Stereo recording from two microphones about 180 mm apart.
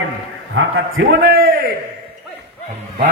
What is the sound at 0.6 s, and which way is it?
A man's voice, 80° right.